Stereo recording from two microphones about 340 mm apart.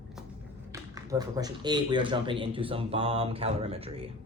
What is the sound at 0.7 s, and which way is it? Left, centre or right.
A man's voice, centre.